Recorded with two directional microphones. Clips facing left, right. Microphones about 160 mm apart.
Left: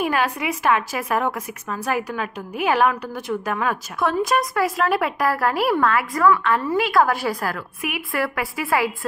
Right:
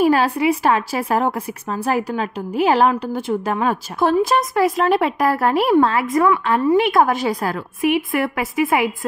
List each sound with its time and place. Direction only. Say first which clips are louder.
0.0 s a woman's voice: right 7 dB; 30° right (ahead or behind)